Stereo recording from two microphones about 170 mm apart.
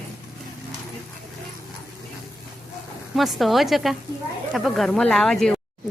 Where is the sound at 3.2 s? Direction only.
Centre (ahead or behind).